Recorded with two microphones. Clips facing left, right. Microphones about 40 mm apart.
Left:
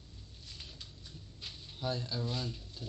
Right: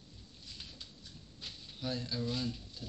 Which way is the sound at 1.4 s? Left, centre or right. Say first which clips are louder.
Left 2 dB; centre.